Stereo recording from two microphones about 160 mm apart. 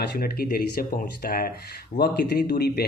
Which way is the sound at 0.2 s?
70° left (ahead or behind).